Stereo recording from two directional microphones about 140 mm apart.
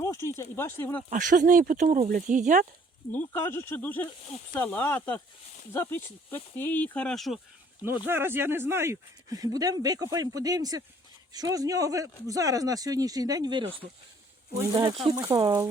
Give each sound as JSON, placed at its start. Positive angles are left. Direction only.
{"t": 0.0, "sound": "a sound", "side_deg": 20}
{"t": 0.5, "sound": "speech", "side_deg": 15}
{"t": 1.1, "sound": "speech", "side_deg": -70}
{"t": 3.1, "sound": "speech", "side_deg": 15}
{"t": 7.8, "sound": "speech", "side_deg": -15}
{"t": 14.7, "sound": "speech", "side_deg": -20}